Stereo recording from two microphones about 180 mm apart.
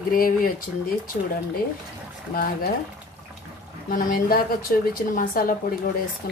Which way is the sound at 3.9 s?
50° left (ahead or behind).